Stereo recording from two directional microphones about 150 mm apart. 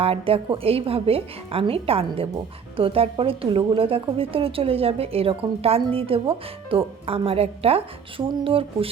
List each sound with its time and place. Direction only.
0.0 s a woman's voice: 40° right (ahead or behind)